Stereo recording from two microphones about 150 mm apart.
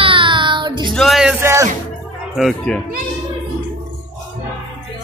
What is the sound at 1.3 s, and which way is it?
Music, 15° right (ahead or behind).